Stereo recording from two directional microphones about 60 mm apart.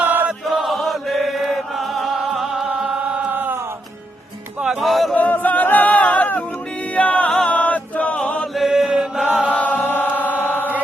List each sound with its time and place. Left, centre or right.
0.0 s chant: right
0.4 s chant: centre
3.2 s mantra: right
4.6 s music: centre
5.1 s chatter: left
6.9 s music: left
7.5 s choir: left
8.5 s chant: centre
9.5 s chant: left
10.6 s chant: right